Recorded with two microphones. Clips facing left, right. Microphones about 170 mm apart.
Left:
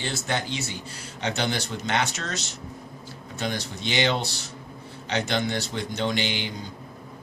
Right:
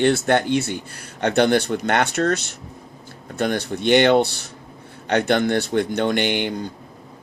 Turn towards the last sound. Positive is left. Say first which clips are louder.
# right 8 dB
turn(degrees=-55)  # may be behind; listen again after turning